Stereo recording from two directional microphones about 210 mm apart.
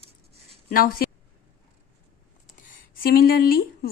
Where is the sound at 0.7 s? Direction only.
45° left (ahead or behind).